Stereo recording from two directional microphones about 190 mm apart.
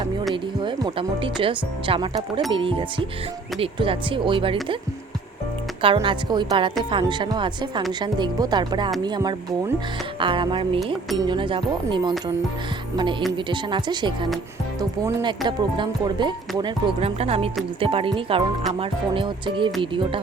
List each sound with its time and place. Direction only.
0.6 s speech: 25° right (ahead or behind)
5.8 s speech: 25° right (ahead or behind)
13.3 s speech: 25° right (ahead or behind)